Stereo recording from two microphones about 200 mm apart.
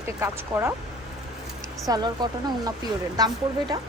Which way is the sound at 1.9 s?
20° right (ahead or behind).